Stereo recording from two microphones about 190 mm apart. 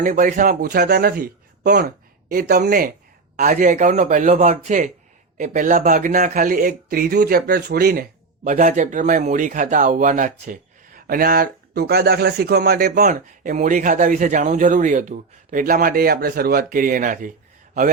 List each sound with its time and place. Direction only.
0.0 s speech: 40° right (ahead or behind); by 1.9 s 60° right (ahead or behind)
2.3 s speech: 50° right (ahead or behind)
8.4 s speech: 45° right (ahead or behind)